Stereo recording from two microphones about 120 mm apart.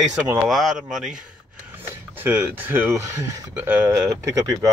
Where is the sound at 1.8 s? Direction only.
20° right (ahead or behind).